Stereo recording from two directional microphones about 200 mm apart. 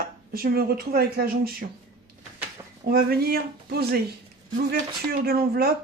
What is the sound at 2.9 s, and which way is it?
Speech, 50° right (ahead or behind).